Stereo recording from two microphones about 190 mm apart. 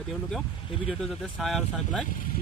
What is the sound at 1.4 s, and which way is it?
Speech, centre (ahead or behind).